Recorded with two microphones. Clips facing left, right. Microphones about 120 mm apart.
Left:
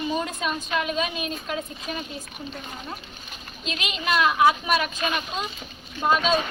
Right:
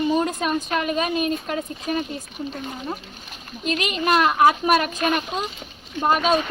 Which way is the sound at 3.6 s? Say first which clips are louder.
Right 6 dB; 50° right (ahead or behind).